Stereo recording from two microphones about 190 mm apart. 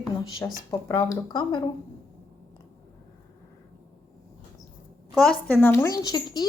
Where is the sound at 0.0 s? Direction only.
20° left (ahead or behind).